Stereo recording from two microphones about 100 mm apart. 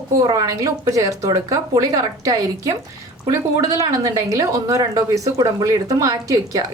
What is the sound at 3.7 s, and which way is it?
Speech, 35° right (ahead or behind).